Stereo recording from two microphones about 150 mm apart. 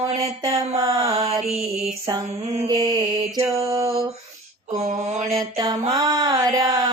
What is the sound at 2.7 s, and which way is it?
Mantra, 30° right (ahead or behind).